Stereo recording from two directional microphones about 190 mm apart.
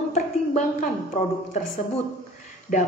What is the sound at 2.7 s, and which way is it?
Speech, 50° left (ahead or behind).